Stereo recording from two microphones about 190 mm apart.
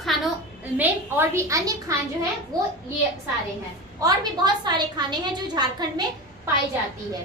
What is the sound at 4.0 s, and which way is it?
A woman's voice, 20° right (ahead or behind).